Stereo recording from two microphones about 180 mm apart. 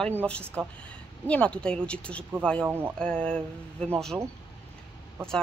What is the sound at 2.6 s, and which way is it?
Speech, 10° right (ahead or behind).